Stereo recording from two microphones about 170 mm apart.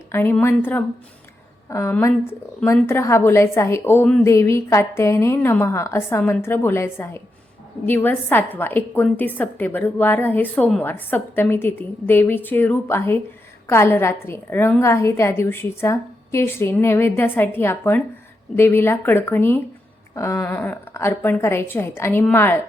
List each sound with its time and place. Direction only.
0.1 s a woman's voice: 15° left (ahead or behind)